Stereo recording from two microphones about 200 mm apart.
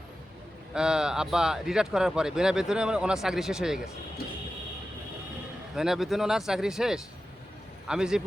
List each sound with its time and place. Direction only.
0.7 s speech: 5° right (ahead or behind)
5.7 s speech: centre (ahead or behind)